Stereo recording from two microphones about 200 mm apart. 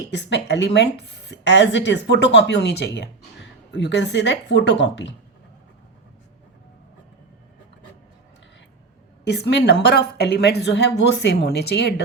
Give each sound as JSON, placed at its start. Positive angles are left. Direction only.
{"t": 0.1, "sound": "speech", "side_deg": 60}
{"t": 9.3, "sound": "speech", "side_deg": 55}